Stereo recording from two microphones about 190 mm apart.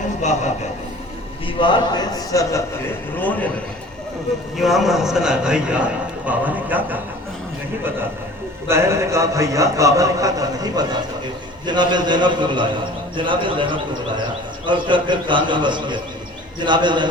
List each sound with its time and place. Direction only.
1.5 s a man's voice: 25° left (ahead or behind); by 3.5 s 10° left (ahead or behind)
4.5 s a man's voice: centre (ahead or behind)
8.6 s a man's voice: 15° right (ahead or behind)